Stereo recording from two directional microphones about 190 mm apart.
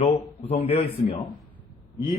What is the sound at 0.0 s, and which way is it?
Speech, 30° left (ahead or behind).